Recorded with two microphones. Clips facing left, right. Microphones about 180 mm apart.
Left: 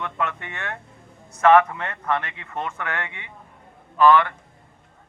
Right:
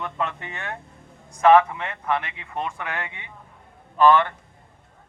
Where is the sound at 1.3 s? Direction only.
10° right (ahead or behind).